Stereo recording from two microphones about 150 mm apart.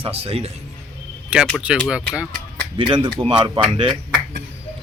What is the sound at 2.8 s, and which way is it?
A man's voice, 35° right (ahead or behind).